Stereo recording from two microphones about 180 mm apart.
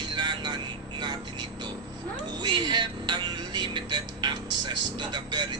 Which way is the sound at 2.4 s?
25° right (ahead or behind).